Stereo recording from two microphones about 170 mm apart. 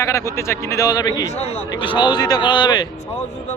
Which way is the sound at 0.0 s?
15° left (ahead or behind).